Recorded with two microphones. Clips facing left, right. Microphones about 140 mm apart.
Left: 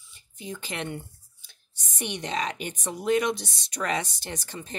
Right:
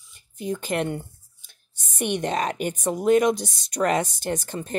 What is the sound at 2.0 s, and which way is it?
Speech, 50° right (ahead or behind).